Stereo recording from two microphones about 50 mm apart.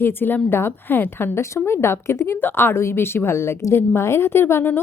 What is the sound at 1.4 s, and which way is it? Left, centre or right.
A woman's voice, left.